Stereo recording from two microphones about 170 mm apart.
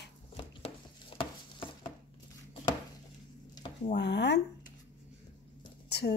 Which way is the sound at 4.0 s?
90° left.